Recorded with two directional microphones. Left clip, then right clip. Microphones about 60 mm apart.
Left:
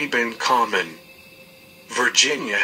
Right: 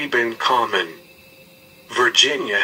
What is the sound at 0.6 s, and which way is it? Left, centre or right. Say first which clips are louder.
Speech: right 1 dB; centre.